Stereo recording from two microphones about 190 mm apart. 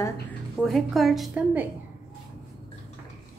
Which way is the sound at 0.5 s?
Centre (ahead or behind).